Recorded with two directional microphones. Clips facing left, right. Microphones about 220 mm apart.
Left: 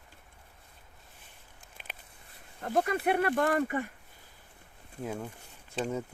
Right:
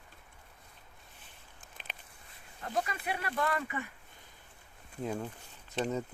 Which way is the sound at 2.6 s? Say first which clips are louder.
Left 7 dB; 55° left (ahead or behind).